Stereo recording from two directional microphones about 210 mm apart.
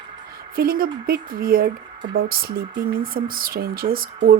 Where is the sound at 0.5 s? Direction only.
45° right (ahead or behind).